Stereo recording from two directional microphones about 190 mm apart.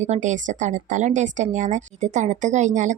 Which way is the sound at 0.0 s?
40° right (ahead or behind).